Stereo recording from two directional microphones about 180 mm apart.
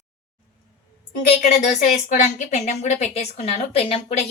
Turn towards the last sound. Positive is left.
turn(degrees=30)  # may be behind; listen again after turning